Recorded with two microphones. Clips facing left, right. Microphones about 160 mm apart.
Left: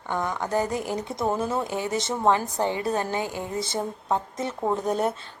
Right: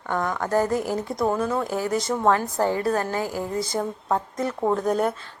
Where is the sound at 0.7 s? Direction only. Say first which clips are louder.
Right 4 dB; 45° right (ahead or behind).